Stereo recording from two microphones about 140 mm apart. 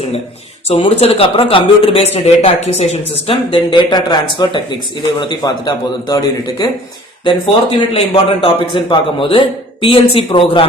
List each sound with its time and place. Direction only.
0.8 s a man's voice: 40° left (ahead or behind); by 6.7 s 25° left (ahead or behind)
7.3 s speech: 40° left (ahead or behind)